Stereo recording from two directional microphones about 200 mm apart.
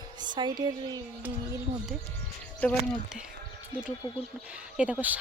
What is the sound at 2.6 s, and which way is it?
Speech, 5° left (ahead or behind).